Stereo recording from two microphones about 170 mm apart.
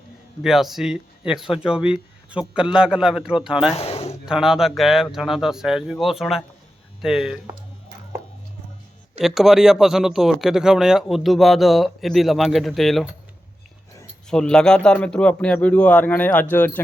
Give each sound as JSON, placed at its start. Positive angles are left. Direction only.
{"t": 0.4, "sound": "speech", "side_deg": 0}
{"t": 3.8, "sound": "a sound", "side_deg": 35}
{"t": 4.3, "sound": "speech", "side_deg": -5}
{"t": 9.2, "sound": "speech", "side_deg": 0}
{"t": 14.3, "sound": "a man's voice", "side_deg": 5}